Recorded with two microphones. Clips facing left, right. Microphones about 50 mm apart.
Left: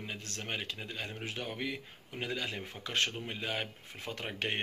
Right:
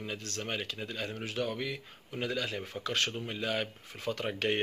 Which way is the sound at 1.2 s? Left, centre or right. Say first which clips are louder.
Right 4 dB; left.